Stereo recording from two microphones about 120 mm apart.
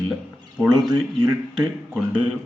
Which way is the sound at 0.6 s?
5° right (ahead or behind).